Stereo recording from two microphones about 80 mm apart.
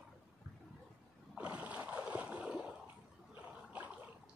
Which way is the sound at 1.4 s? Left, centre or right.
Centre.